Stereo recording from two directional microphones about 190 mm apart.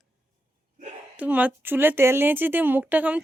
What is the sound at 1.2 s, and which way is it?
Speech, 10° right (ahead or behind).